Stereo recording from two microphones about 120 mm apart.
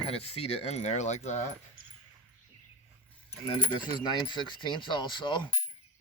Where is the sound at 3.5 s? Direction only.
40° left (ahead or behind).